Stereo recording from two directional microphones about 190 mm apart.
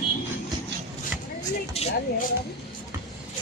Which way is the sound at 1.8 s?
30° left (ahead or behind).